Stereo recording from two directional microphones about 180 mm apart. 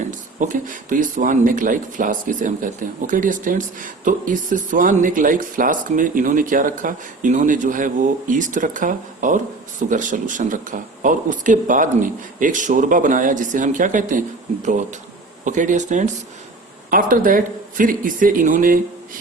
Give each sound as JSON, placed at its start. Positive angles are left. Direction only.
{"t": 0.3, "sound": "speech", "side_deg": -45}